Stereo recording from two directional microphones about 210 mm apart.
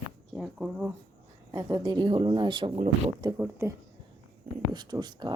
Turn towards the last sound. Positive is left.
turn(degrees=-20)  # may be behind; listen again after turning